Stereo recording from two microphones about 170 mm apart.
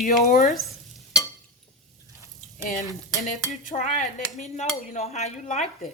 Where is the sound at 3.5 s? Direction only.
50° left (ahead or behind).